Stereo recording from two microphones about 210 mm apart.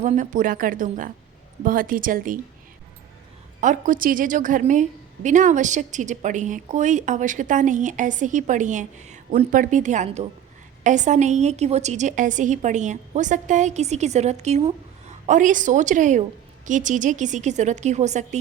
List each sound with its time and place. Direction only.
0.0 s a woman's voice: 35° right (ahead or behind)
3.6 s a woman's voice: 40° right (ahead or behind)